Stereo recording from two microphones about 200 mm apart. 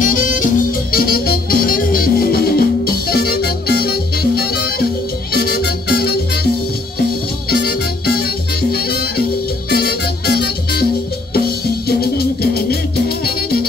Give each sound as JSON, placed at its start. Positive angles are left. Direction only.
{"t": 0.0, "sound": "music", "side_deg": 40}
{"t": 8.7, "sound": "music", "side_deg": 50}